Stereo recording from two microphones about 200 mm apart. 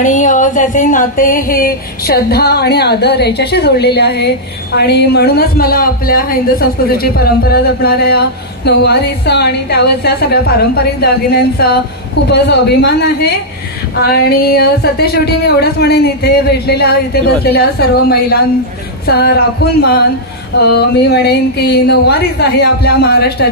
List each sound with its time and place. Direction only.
0.0 s a woman's voice: 40° left (ahead or behind)
19.0 s a woman's voice: 50° left (ahead or behind)